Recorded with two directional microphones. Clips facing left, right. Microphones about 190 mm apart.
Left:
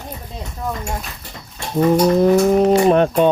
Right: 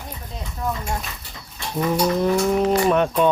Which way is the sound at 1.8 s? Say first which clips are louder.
Left 7 dB; 45° left (ahead or behind).